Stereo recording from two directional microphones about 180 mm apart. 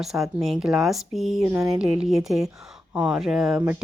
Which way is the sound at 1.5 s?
15° right (ahead or behind).